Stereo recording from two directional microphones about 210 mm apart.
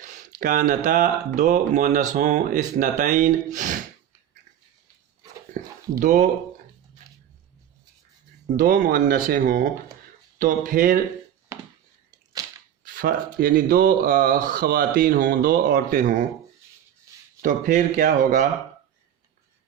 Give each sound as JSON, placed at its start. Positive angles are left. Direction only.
{"t": 0.0, "sound": "speech", "side_deg": -35}
{"t": 6.0, "sound": "speech", "side_deg": -40}
{"t": 8.5, "sound": "speech", "side_deg": -40}
{"t": 12.8, "sound": "speech", "side_deg": -45}
{"t": 17.1, "sound": "a sound", "side_deg": -15}
{"t": 17.4, "sound": "speech", "side_deg": -40}